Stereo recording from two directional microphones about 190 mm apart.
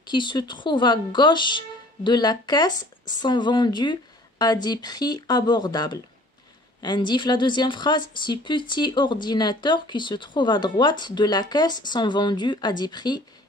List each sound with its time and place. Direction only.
0.1 s speech: 25° left (ahead or behind)